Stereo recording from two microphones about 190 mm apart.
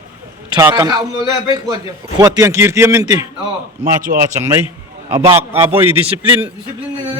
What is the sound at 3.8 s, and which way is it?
Speech, 45° right (ahead or behind).